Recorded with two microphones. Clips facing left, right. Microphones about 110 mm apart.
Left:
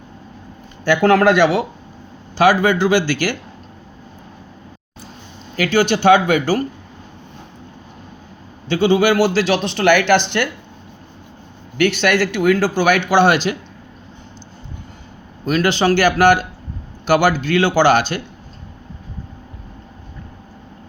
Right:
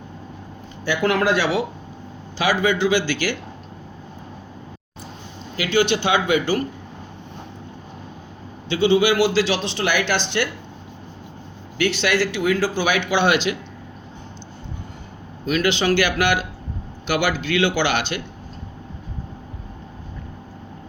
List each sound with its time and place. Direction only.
1.2 s speech: 55° left (ahead or behind)
5.5 s speech: 45° left (ahead or behind)
8.7 s speech: 45° left (ahead or behind)
11.8 s speech: 55° left (ahead or behind)
15.4 s a man's voice: 40° left (ahead or behind)